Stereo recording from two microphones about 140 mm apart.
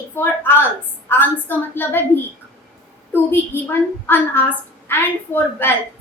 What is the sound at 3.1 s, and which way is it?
A woman's voice, 15° left (ahead or behind).